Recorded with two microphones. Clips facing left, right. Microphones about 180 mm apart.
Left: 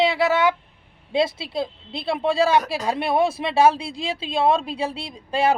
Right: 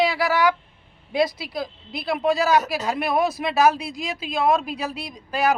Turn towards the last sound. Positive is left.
turn(degrees=30)  # may be behind; listen again after turning